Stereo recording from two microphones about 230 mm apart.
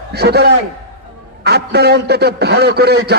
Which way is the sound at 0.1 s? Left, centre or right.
Right.